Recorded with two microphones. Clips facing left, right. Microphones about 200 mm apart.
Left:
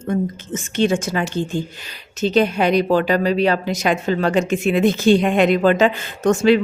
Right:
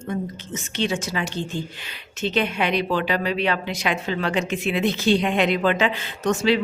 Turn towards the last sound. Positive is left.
turn(degrees=50)  # may be behind; listen again after turning